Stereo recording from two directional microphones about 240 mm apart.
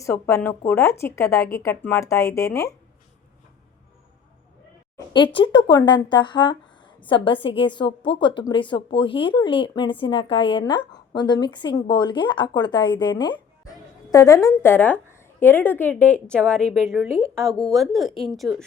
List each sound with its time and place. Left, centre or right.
0.0 s speech: centre
4.9 s a woman's voice: centre